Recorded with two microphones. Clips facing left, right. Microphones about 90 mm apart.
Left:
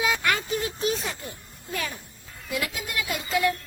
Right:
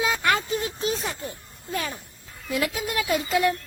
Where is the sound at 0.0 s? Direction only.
30° right (ahead or behind).